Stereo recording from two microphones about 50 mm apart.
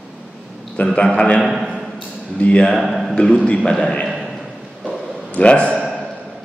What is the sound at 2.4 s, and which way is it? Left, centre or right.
Speech, left.